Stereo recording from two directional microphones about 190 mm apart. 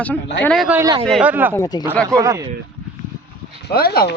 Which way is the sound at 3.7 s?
55° left (ahead or behind).